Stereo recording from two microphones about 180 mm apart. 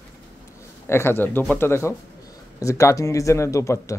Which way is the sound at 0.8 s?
15° left (ahead or behind).